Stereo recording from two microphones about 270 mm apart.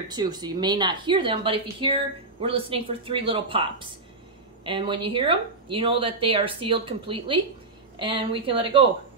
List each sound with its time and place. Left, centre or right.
0.1 s speech: centre